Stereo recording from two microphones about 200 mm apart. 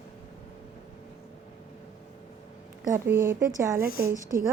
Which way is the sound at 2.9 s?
10° right (ahead or behind).